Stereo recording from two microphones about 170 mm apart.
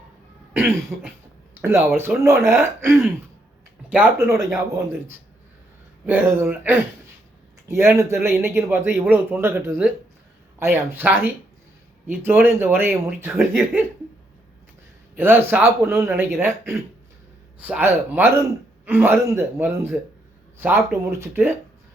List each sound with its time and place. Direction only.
0.5 s cough: 10° right (ahead or behind)
2.0 s speech: 15° right (ahead or behind)
6.1 s speech: 15° right (ahead or behind)
15.1 s speech: 10° right (ahead or behind)